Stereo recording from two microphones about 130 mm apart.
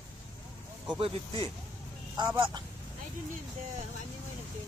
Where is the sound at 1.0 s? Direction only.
45° right (ahead or behind).